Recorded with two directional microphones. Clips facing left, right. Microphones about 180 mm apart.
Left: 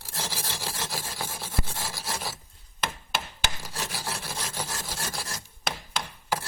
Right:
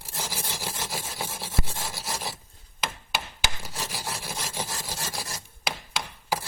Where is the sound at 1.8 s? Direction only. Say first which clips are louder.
Even; centre (ahead or behind).